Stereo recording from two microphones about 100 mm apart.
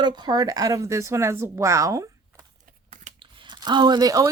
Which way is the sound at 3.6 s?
45° right (ahead or behind).